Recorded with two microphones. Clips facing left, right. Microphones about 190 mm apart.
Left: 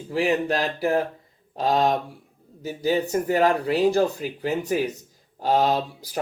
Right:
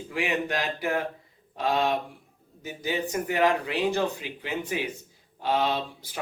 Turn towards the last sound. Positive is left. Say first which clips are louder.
# left 6 dB
turn(degrees=40)  # may be behind; listen again after turning